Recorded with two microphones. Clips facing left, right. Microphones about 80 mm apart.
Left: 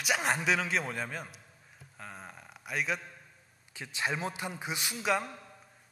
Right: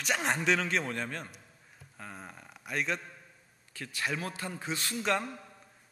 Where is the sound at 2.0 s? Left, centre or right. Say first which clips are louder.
Even; centre.